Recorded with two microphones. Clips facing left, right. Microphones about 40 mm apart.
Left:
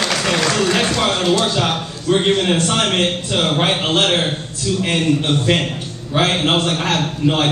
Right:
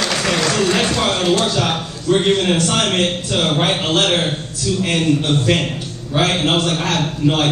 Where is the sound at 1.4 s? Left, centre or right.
Centre.